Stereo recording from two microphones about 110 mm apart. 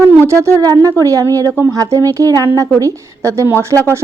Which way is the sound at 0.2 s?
25° right (ahead or behind).